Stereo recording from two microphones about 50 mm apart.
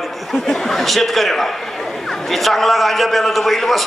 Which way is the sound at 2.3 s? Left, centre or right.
Centre.